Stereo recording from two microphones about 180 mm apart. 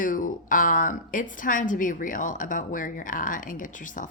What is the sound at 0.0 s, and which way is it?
A woman's voice, 45° left (ahead or behind).